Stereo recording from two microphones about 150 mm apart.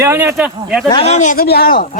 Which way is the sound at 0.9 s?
40° left (ahead or behind).